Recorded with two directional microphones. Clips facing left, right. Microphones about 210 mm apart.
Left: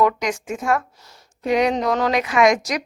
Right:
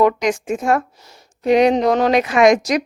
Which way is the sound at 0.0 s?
25° right (ahead or behind).